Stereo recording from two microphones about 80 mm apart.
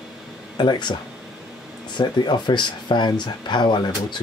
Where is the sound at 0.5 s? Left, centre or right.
Left.